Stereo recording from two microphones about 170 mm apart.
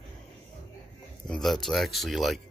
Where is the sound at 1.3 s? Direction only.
Centre (ahead or behind).